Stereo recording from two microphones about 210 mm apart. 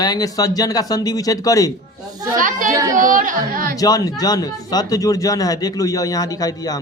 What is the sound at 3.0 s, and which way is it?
Speech, 40° right (ahead or behind).